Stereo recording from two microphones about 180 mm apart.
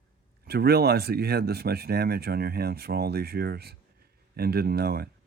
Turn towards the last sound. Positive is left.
turn(degrees=-60)  # may be behind; listen again after turning